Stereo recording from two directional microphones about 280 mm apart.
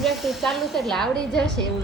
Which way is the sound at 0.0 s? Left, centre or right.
Centre.